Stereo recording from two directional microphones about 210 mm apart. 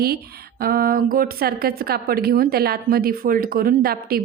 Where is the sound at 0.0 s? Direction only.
45° right (ahead or behind).